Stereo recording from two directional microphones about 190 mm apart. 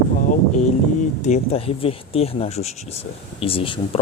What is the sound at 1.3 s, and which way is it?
Speech, 35° left (ahead or behind).